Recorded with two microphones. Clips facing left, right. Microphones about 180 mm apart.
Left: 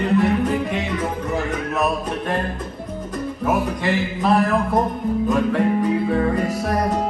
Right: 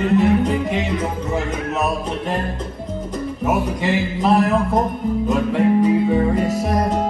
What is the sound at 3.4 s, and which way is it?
Speech, 10° right (ahead or behind).